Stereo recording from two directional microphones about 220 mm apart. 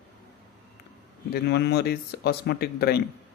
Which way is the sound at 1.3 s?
50° left (ahead or behind).